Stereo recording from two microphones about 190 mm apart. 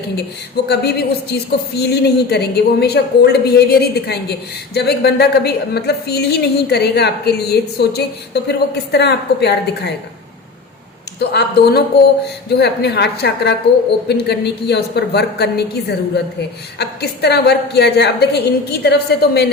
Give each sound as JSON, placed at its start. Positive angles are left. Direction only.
{"t": 0.5, "sound": "a woman's voice", "side_deg": 60}
{"t": 11.2, "sound": "a woman's voice", "side_deg": 60}
{"t": 16.7, "sound": "a woman's voice", "side_deg": 60}